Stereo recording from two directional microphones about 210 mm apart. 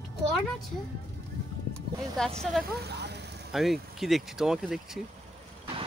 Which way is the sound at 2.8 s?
50° right (ahead or behind).